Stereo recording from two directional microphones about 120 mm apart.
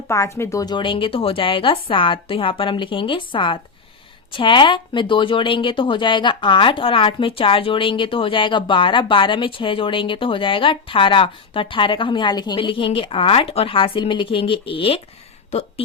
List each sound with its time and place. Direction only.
0.1 s a woman's voice: 25° left (ahead or behind)
12.5 s a woman's voice: 45° left (ahead or behind)